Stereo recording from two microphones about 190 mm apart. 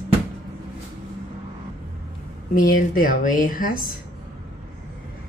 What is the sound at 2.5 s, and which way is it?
Speech, 45° left (ahead or behind).